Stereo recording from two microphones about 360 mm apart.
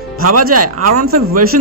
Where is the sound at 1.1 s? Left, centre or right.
Right.